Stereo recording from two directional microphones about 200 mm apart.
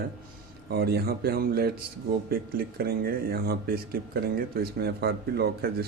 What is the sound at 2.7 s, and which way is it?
Speech, 50° right (ahead or behind).